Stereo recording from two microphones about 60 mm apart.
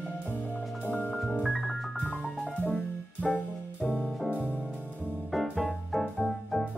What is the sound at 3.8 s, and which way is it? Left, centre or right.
Music, centre.